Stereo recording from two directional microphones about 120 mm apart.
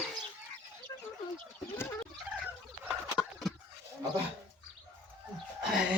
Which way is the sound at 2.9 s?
Centre (ahead or behind).